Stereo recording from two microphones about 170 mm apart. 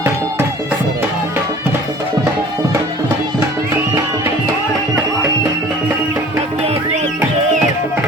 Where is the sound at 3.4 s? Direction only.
15° right (ahead or behind).